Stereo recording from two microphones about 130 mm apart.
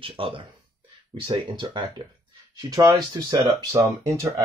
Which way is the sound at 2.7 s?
30° right (ahead or behind).